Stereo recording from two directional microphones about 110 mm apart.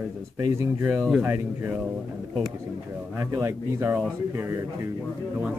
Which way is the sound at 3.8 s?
15° right (ahead or behind).